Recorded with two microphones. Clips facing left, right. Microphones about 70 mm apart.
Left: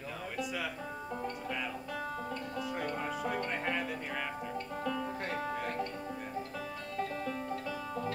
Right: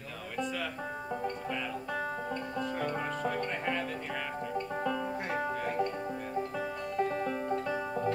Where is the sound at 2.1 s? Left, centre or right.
Right.